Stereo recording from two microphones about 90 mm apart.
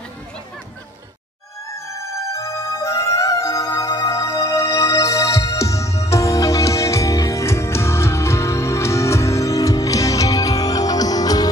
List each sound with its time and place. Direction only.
2.0 s music: 35° left (ahead or behind)